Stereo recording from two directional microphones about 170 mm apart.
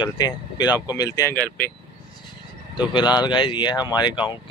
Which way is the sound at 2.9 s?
25° left (ahead or behind).